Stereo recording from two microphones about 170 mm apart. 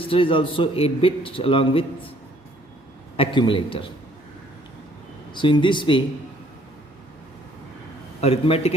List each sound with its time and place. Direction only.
0.1 s a man's voice: 30° left (ahead or behind)
3.2 s a man's voice: 30° left (ahead or behind)
5.3 s speech: 30° left (ahead or behind)
8.2 s a man's voice: 35° left (ahead or behind)